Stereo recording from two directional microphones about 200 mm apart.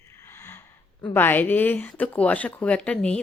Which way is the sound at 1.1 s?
10° left (ahead or behind).